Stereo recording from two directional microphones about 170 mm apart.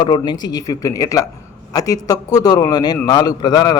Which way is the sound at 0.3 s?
25° left (ahead or behind).